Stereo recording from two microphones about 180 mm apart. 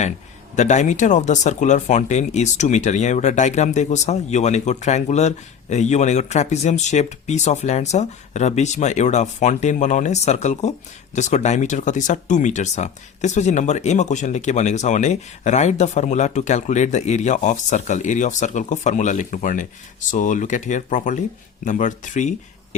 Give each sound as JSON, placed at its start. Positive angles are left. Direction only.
{"t": 0.5, "sound": "speech", "side_deg": 40}